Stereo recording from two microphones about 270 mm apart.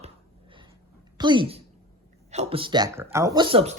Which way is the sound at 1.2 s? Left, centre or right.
Centre.